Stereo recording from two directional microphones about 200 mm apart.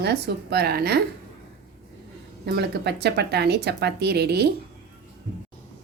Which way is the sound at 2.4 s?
55° right (ahead or behind).